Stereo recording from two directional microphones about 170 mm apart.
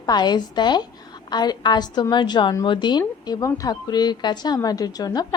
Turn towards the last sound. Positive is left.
turn(degrees=20)  # may be behind; listen again after turning